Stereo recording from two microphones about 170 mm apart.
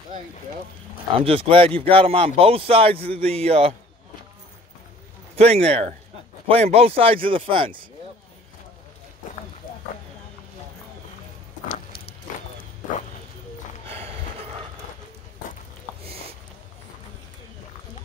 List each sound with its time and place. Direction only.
1.2 s speech: 35° right (ahead or behind)
5.3 s speech: 35° right (ahead or behind)
13.8 s a sound: 35° right (ahead or behind)